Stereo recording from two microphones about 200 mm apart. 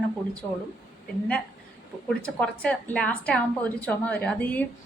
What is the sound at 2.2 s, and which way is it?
A woman's voice, 5° left (ahead or behind).